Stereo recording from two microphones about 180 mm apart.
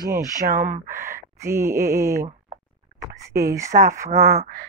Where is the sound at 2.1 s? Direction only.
50° right (ahead or behind).